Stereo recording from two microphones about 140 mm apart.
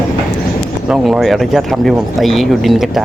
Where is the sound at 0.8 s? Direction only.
5° right (ahead or behind).